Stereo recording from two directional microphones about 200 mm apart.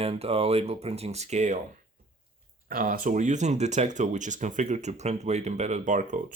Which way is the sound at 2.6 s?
45° right (ahead or behind).